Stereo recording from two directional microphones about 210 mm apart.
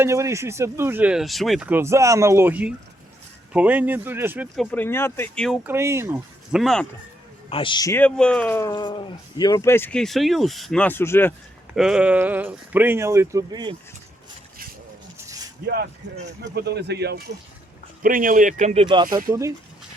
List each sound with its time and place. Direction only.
0.0 s speech: 15° right (ahead or behind)
4.5 s speech: 5° left (ahead or behind)
5.6 s speech: 10° right (ahead or behind)
7.5 s speech: 25° left (ahead or behind)
11.7 s speech: 5° right (ahead or behind); by 13.7 s 20° right (ahead or behind)
15.6 s speech: 50° right (ahead or behind)
18.0 s speech: 40° right (ahead or behind); by 19.0 s 25° right (ahead or behind)
19.1 s speech: 15° right (ahead or behind)